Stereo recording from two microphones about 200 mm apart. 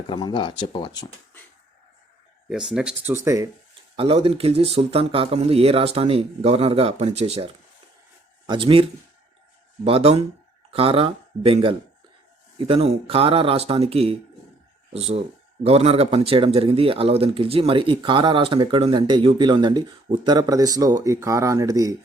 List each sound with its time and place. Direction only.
0.1 s speech: 25° left (ahead or behind)
2.5 s speech: 5° right (ahead or behind)
3.2 s speech: 15° right (ahead or behind)
3.9 s speech: 30° right (ahead or behind)